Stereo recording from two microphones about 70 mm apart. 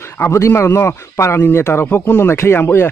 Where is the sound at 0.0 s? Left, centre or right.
Left.